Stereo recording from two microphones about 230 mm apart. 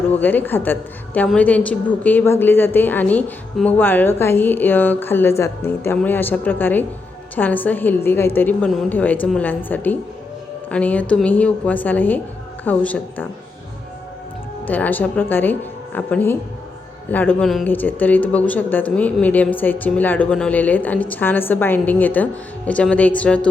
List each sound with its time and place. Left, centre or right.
0.1 s speech: centre
14.7 s speech: centre